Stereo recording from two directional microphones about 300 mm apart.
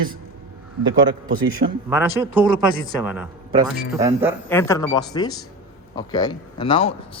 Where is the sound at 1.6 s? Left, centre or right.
Right.